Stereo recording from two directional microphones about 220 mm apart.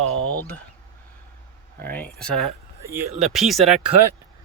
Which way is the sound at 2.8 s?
10° right (ahead or behind).